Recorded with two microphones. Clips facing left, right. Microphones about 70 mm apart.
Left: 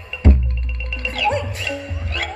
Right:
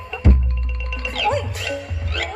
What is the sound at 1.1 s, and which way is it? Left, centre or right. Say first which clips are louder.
Music: even; left.